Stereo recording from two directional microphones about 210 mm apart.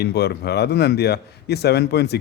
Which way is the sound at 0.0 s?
50° left (ahead or behind).